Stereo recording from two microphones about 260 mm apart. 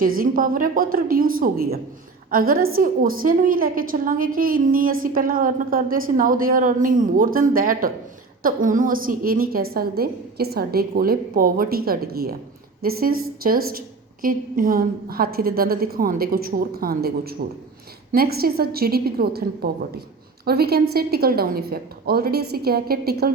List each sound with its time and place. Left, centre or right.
0.2 s a woman's voice: right